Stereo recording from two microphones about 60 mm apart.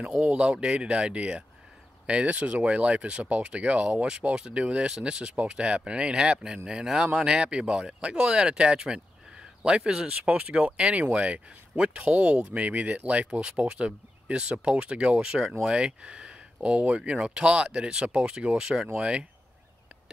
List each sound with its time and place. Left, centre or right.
0.2 s speech: centre